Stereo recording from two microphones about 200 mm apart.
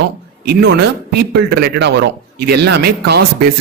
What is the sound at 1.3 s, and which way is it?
A man's voice, 50° right (ahead or behind).